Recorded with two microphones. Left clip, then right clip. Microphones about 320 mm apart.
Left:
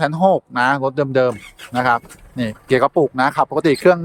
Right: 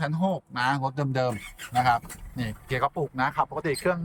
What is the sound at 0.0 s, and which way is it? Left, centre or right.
Speech, centre.